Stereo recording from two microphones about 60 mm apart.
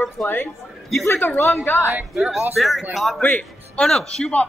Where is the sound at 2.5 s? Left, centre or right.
Centre.